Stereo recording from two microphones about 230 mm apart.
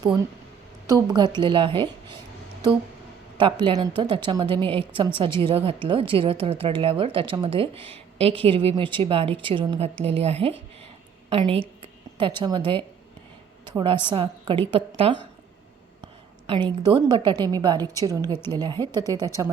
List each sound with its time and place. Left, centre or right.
0.9 s a woman's voice: centre
3.3 s a woman's voice: right
16.6 s a woman's voice: centre